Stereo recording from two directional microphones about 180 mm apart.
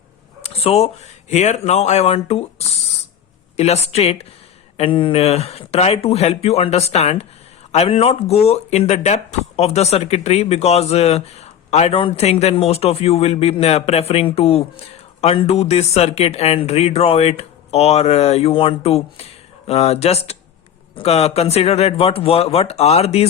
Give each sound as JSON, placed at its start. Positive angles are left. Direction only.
{"t": 0.4, "sound": "speech", "side_deg": 35}